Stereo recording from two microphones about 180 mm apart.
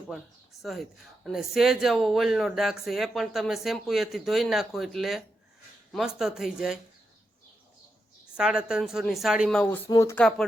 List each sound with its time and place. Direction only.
0.6 s a woman's voice: centre (ahead or behind)
8.4 s a woman's voice: 5° right (ahead or behind)
9.9 s speech: 15° left (ahead or behind)
10.2 s a woman's voice: 5° left (ahead or behind)